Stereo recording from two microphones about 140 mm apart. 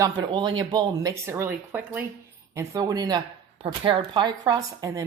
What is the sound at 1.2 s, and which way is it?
Speech, 15° right (ahead or behind).